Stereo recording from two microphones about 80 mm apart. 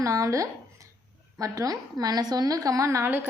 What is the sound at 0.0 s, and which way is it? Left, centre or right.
A woman's voice, right.